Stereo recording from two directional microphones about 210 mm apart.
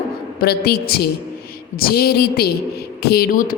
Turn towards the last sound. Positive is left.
turn(degrees=40)  # may be behind; listen again after turning